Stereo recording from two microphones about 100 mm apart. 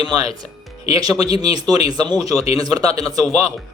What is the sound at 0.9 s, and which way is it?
Speech, 40° right (ahead or behind).